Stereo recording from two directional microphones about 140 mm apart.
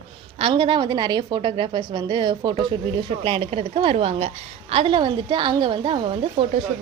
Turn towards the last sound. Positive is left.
turn(degrees=-40)  # may be behind; listen again after turning